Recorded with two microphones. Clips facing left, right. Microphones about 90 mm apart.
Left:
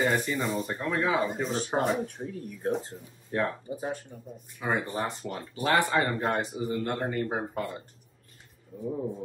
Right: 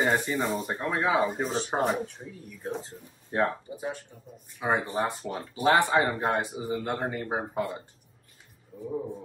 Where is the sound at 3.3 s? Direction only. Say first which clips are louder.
Right 2 dB; 25° right (ahead or behind).